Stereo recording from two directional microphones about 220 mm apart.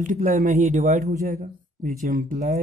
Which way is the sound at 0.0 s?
35° right (ahead or behind).